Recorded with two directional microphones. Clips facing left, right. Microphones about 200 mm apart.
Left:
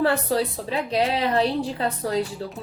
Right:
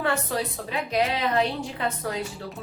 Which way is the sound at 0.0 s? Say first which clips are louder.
Left 5 dB; 35° left (ahead or behind).